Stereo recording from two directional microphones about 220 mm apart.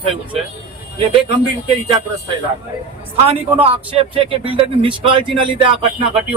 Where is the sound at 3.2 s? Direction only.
25° right (ahead or behind).